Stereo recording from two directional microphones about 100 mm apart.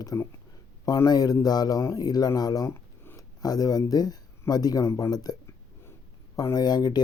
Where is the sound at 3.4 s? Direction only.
40° left (ahead or behind).